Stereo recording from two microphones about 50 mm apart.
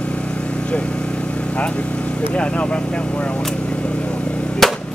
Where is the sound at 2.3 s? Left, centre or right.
Left.